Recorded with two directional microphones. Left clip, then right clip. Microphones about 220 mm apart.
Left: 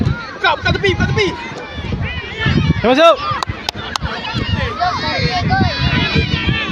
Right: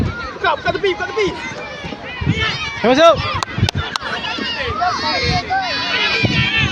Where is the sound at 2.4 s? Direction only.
45° right (ahead or behind).